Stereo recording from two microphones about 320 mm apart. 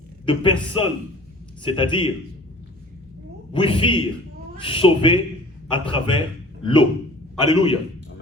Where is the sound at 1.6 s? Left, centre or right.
Centre.